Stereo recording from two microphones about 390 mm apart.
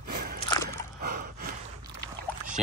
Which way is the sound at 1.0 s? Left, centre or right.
Right.